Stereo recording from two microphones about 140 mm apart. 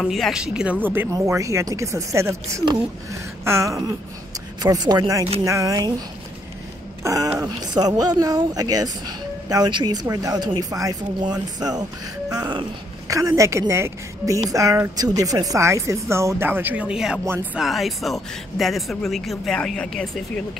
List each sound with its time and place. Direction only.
0.0 s a woman's voice: centre (ahead or behind)